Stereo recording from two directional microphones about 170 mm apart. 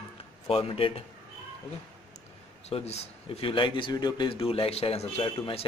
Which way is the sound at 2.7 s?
35° left (ahead or behind).